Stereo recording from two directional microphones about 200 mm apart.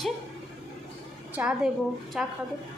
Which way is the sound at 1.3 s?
5° right (ahead or behind).